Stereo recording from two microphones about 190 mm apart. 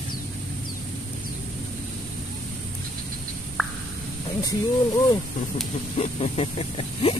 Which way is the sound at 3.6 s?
Centre (ahead or behind).